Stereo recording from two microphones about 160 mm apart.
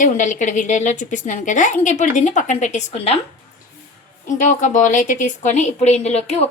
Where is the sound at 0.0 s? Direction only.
50° left (ahead or behind).